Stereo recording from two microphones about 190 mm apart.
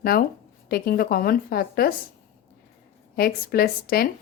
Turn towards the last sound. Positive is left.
turn(degrees=55)  # may be behind; listen again after turning